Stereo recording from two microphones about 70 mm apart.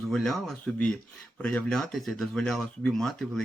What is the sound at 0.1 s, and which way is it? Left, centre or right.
Speech, centre.